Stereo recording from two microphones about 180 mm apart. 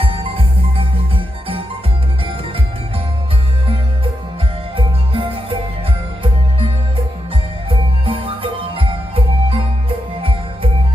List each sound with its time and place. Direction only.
0.0 s music: 30° right (ahead or behind)
4.8 s music: 30° right (ahead or behind)
7.7 s music: 30° right (ahead or behind)